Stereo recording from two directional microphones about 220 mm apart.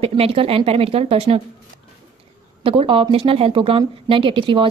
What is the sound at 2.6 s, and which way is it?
A woman's voice, 25° right (ahead or behind).